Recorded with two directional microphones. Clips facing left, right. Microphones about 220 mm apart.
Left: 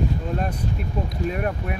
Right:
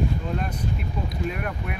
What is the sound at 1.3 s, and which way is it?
Speech, 40° left (ahead or behind).